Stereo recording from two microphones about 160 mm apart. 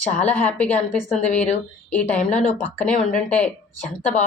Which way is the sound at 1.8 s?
10° left (ahead or behind).